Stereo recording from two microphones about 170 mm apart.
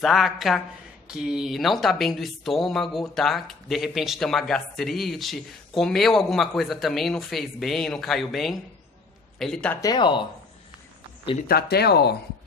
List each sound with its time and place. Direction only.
0.0 s speech: centre (ahead or behind)
9.8 s speech: 25° left (ahead or behind)
11.4 s speech: 70° left (ahead or behind)